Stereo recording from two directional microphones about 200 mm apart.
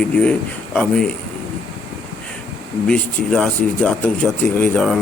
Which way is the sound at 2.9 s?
5° left (ahead or behind).